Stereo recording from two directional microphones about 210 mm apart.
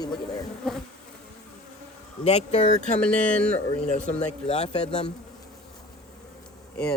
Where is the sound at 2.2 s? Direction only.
30° left (ahead or behind).